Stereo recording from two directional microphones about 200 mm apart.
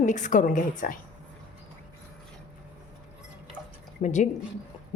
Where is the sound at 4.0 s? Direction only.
35° left (ahead or behind).